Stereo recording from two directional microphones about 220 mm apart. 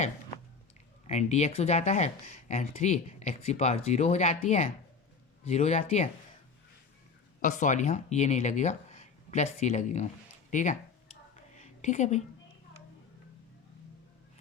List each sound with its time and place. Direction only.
1.0 s speech: 30° left (ahead or behind)
7.4 s speech: 35° left (ahead or behind)
10.5 s a sound: 35° left (ahead or behind)